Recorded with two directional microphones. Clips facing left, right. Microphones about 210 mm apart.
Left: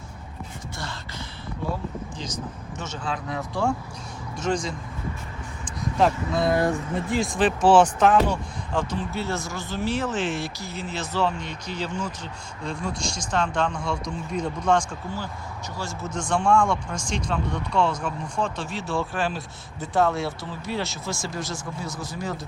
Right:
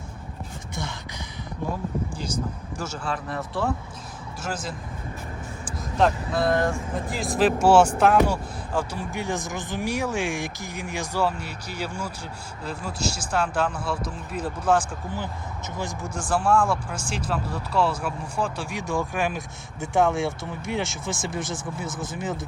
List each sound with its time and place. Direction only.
2.1 s speech: 10° right (ahead or behind)
5.6 s vehicle: centre (ahead or behind)
6.9 s speech: 5° right (ahead or behind)
21.5 s speech: 50° right (ahead or behind)